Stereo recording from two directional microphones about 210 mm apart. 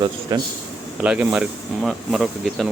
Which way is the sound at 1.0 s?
5° right (ahead or behind).